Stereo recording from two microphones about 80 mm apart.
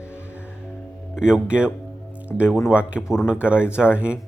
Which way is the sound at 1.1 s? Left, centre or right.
Centre.